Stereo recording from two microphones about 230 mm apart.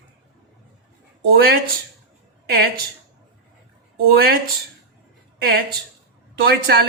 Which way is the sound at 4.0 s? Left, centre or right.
Right.